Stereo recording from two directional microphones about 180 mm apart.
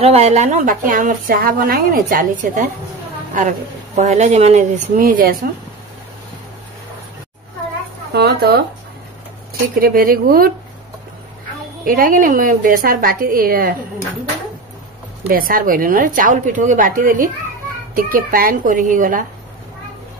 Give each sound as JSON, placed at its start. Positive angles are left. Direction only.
{"t": 0.0, "sound": "a woman's voice", "side_deg": -35}
{"t": 8.1, "sound": "a woman's voice", "side_deg": -65}
{"t": 11.8, "sound": "a woman's voice", "side_deg": -50}
{"t": 15.2, "sound": "a woman's voice", "side_deg": -55}